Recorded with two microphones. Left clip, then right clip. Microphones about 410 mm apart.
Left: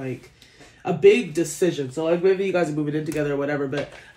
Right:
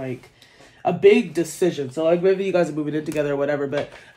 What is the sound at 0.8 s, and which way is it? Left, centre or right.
Speech, right.